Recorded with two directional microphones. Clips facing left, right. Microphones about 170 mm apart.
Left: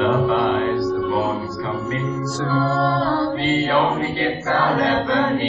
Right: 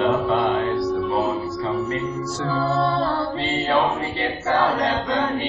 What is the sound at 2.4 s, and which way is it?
Music, 20° right (ahead or behind).